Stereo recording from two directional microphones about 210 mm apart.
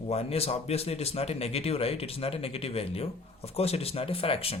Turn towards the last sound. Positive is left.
turn(degrees=25)  # may be behind; listen again after turning